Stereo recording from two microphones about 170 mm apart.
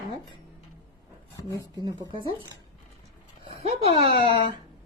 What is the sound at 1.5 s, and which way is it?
Speech, 25° right (ahead or behind).